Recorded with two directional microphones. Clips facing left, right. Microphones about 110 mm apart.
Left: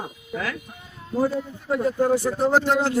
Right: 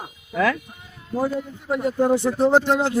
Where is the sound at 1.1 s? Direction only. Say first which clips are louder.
Left 1 dB; 15° right (ahead or behind).